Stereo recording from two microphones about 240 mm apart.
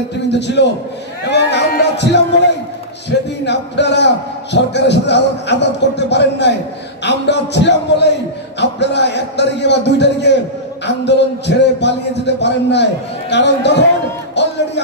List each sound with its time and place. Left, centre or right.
0.3 s a man's voice: left
14.4 s music: left